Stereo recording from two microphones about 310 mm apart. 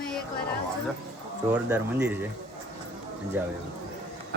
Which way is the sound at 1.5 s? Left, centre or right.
Centre.